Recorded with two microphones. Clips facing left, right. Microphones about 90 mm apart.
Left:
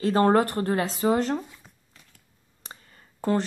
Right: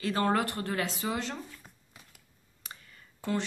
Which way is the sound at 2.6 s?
35° left (ahead or behind).